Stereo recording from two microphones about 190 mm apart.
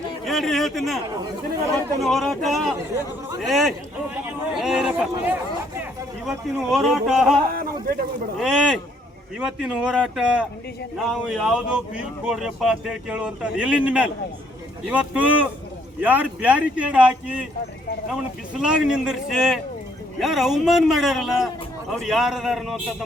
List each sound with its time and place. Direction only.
0.3 s speech: centre (ahead or behind)
2.0 s speech: centre (ahead or behind)
7.5 s a sound: 50° right (ahead or behind)
8.4 s speech: 5° right (ahead or behind)